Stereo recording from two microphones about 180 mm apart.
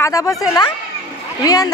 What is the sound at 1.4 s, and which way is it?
Speech, 20° left (ahead or behind).